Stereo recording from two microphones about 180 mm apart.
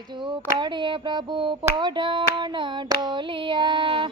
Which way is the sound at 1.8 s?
25° right (ahead or behind).